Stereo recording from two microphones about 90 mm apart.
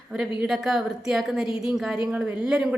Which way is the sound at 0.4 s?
5° right (ahead or behind).